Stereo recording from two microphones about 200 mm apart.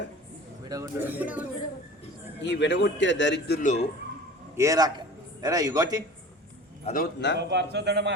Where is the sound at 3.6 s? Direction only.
35° left (ahead or behind).